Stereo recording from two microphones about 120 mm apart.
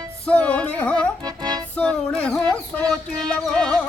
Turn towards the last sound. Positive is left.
turn(degrees=5)  # may be behind; listen again after turning